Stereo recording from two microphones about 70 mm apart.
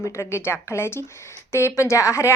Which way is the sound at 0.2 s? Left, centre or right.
Left.